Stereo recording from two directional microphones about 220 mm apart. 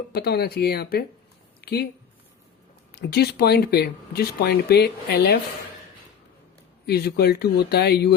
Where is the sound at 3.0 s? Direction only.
45° left (ahead or behind).